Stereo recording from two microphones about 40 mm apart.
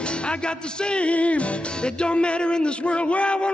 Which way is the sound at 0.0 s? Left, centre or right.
Left.